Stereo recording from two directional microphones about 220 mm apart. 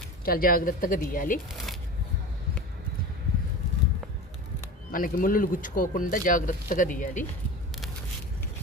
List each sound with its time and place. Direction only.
0.3 s speech: 40° left (ahead or behind)
4.9 s speech: 40° left (ahead or behind)